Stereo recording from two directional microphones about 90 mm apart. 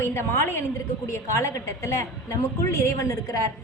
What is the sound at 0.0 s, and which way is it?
A woman's voice, 30° left (ahead or behind).